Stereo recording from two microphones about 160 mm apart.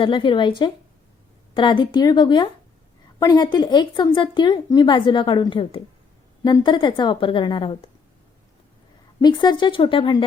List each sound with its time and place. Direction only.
0.0 s a woman's voice: 30° left (ahead or behind)
9.2 s a woman's voice: 25° left (ahead or behind)